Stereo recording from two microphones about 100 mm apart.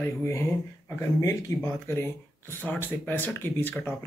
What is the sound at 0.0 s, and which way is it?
Speech, 30° left (ahead or behind).